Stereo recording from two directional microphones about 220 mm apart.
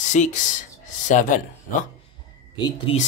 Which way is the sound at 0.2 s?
35° left (ahead or behind).